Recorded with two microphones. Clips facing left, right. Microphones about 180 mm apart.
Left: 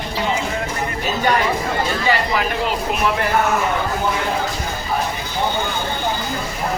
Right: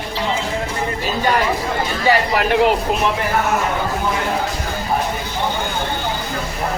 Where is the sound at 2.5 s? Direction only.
70° right (ahead or behind).